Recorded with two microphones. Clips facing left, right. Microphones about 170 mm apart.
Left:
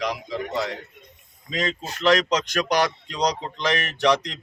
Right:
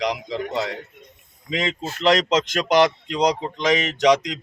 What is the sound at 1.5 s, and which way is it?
Speech, 20° right (ahead or behind).